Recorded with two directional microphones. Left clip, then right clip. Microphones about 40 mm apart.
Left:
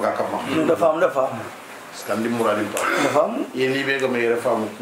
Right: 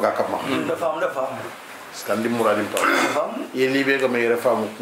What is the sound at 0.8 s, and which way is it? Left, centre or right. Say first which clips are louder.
Speech: left 7 dB; left.